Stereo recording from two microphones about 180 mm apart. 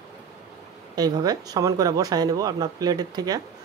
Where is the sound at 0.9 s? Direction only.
20° right (ahead or behind).